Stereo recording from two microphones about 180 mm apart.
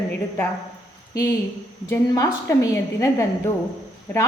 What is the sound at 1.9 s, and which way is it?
A woman's voice, 20° left (ahead or behind).